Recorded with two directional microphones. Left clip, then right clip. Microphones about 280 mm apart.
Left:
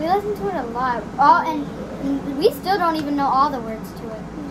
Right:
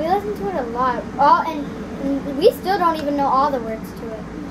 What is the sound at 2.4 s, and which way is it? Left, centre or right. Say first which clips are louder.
A woman's voice: right 2 dB; centre.